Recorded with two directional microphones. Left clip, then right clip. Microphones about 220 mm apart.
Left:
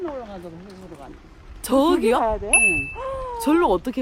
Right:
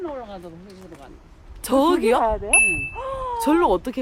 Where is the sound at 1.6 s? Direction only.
5° right (ahead or behind).